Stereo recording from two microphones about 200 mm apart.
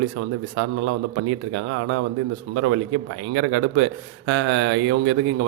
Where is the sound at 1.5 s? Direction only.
65° right (ahead or behind).